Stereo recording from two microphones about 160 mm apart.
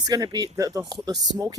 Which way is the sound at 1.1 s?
90° right.